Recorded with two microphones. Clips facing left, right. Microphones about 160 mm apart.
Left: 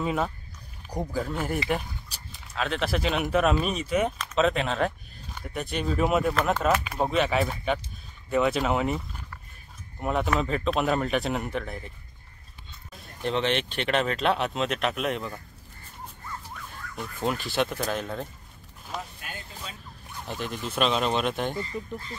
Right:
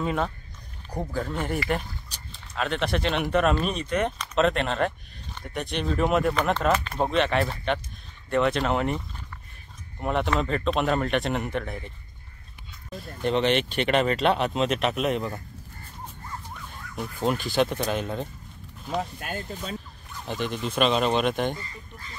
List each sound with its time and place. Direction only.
0.0 s speech: 5° left (ahead or behind)
12.9 s speech: centre (ahead or behind)
16.9 s speech: centre (ahead or behind)
19.1 s speech: 45° right (ahead or behind)
20.2 s speech: centre (ahead or behind)